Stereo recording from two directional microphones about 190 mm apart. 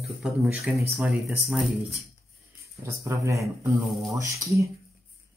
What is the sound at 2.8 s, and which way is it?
Speech, 15° right (ahead or behind).